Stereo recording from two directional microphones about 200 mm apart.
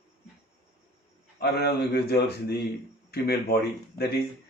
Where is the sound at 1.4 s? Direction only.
55° left (ahead or behind).